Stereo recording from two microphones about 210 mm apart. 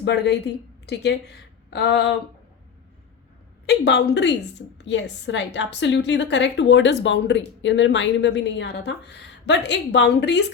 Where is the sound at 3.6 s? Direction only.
50° left (ahead or behind).